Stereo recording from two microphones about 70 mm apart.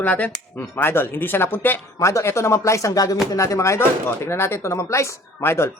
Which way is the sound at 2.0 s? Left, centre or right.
Left.